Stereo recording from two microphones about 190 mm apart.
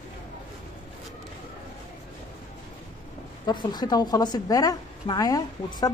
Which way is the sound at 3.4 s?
20° left (ahead or behind).